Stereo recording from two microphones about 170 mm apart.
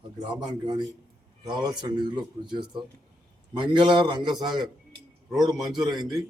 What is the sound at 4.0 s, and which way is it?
Speech, 25° right (ahead or behind).